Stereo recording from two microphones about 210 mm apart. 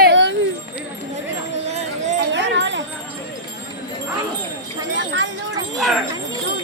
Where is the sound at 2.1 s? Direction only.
60° right (ahead or behind).